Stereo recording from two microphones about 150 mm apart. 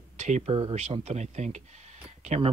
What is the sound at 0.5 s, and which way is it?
Speech, 35° right (ahead or behind).